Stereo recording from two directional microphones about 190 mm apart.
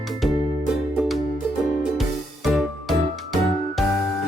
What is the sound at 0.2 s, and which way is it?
Music, centre (ahead or behind).